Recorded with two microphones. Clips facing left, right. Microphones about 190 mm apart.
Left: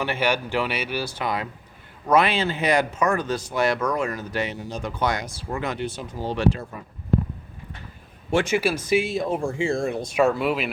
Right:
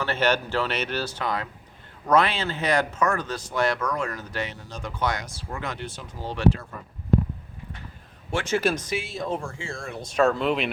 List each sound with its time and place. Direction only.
0.0 s speech: 10° left (ahead or behind)
8.3 s speech: 15° left (ahead or behind)